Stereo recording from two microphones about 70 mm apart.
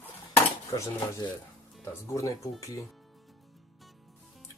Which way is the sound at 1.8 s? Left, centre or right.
Left.